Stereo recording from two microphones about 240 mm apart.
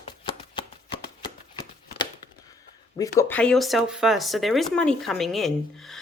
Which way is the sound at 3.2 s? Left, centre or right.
Centre.